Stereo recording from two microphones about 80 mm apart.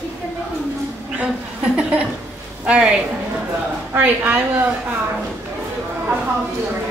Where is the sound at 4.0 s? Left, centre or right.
Right.